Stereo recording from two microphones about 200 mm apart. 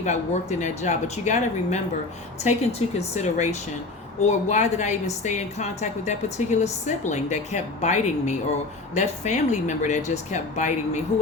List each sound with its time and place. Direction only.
0.0 s a woman's voice: 35° left (ahead or behind)